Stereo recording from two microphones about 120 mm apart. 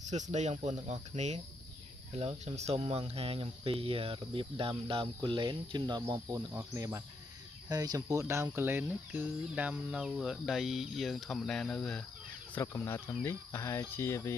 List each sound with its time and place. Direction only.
0.0 s speech: 85° right; by 6.2 s 35° right (ahead or behind)
6.3 s speech: 25° right (ahead or behind); by 12.0 s 5° left (ahead or behind)
12.5 s cricket: 20° left (ahead or behind)